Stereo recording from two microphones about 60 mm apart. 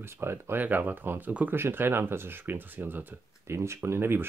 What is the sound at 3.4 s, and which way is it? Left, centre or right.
Speech, right.